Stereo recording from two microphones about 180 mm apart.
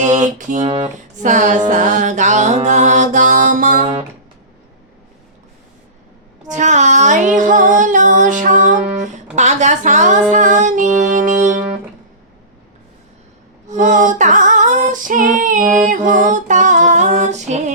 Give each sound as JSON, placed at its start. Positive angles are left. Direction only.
{"t": 0.0, "sound": "music", "side_deg": -40}
{"t": 6.5, "sound": "music", "side_deg": -40}
{"t": 9.3, "sound": "female singing", "side_deg": -40}
{"t": 13.7, "sound": "female singing", "side_deg": -45}